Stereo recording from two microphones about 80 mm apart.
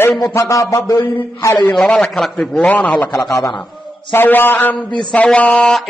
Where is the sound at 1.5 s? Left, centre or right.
Left.